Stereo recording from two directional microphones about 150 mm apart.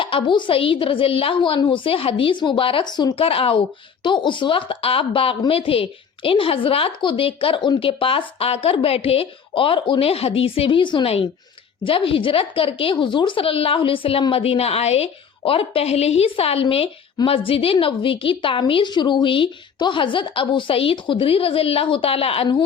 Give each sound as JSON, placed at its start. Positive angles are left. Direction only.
{"t": 0.0, "sound": "a woman's voice", "side_deg": 35}